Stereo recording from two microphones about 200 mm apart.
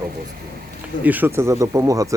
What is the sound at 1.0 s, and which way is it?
Speech, 10° right (ahead or behind).